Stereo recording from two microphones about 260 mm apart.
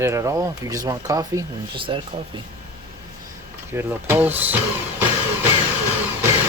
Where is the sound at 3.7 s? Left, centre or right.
Centre.